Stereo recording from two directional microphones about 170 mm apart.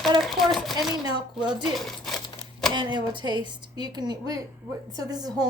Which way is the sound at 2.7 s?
25° right (ahead or behind).